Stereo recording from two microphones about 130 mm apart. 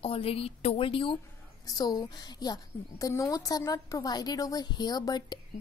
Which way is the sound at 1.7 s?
30° left (ahead or behind).